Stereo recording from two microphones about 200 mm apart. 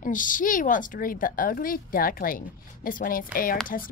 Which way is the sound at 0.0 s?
40° left (ahead or behind).